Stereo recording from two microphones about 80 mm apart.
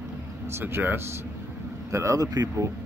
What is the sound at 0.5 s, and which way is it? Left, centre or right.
Speech, right.